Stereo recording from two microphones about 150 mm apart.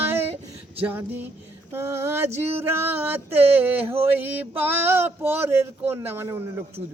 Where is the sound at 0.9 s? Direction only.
15° right (ahead or behind).